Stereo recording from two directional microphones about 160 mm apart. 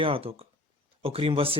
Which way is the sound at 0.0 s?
35° right (ahead or behind).